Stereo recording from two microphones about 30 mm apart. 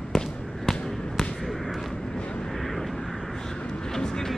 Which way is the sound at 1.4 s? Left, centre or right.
Centre.